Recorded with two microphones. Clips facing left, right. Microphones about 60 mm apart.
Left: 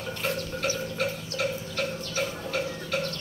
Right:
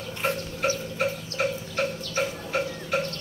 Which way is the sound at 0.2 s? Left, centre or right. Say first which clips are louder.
Right 4 dB; right.